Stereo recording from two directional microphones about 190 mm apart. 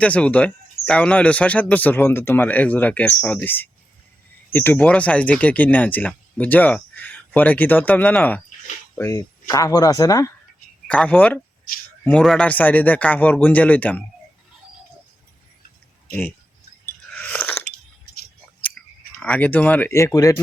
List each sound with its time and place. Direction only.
0.0 s speech: 5° left (ahead or behind)
10.8 s speech: 5° left (ahead or behind)
17.1 s chewing: 5° left (ahead or behind)
18.8 s clicking: 5° left (ahead or behind)
19.2 s speech: 10° left (ahead or behind)